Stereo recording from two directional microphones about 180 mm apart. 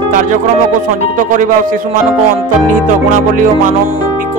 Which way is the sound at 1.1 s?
50° right (ahead or behind).